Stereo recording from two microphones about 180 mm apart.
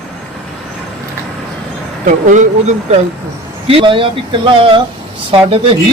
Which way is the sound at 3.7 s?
30° right (ahead or behind).